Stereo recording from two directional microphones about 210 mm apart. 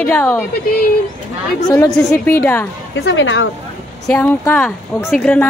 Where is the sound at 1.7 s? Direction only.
10° left (ahead or behind).